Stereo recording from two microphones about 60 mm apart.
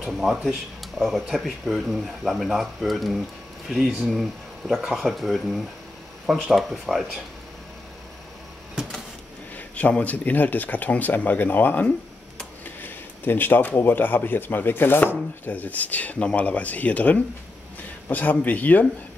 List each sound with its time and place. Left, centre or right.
0.0 s speech: centre
8.8 s printer: centre
9.8 s a man's voice: left